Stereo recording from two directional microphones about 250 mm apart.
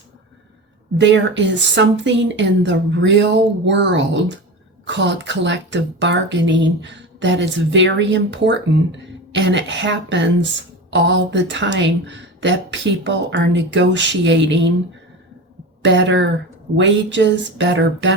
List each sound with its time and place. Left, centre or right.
0.9 s speech: right
15.8 s speech: right